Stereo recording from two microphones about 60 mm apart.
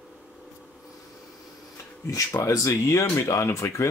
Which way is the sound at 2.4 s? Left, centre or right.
Left.